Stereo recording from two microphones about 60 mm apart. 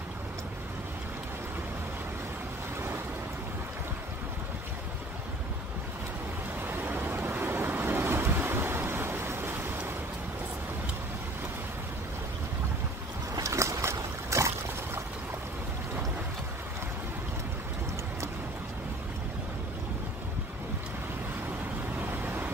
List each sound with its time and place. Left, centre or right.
6.6 s vehicle: right
13.4 s boat: right
22.0 s vehicle: right